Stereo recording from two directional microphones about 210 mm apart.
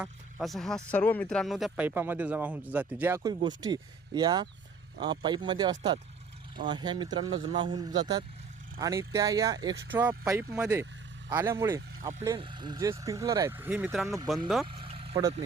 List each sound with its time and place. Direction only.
0.0 s speech: centre (ahead or behind)
14.7 s vehicle: 25° right (ahead or behind)